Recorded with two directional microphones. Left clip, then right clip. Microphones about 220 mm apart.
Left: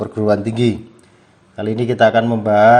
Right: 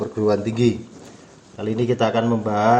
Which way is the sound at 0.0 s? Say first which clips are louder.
Left 3 dB; 40° left (ahead or behind).